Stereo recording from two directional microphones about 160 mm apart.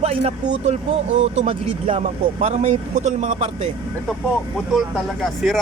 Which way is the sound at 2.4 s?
50° right (ahead or behind).